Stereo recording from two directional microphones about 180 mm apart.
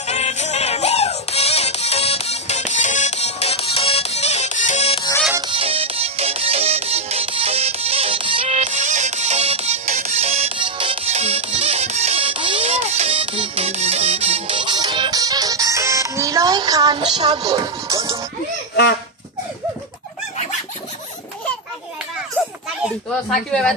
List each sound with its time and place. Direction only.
0.0 s music: 35° left (ahead or behind)
5.5 s music: 30° right (ahead or behind)
23.3 s speech: 5° left (ahead or behind)